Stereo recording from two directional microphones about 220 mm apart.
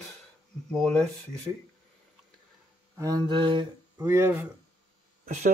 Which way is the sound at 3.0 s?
20° right (ahead or behind).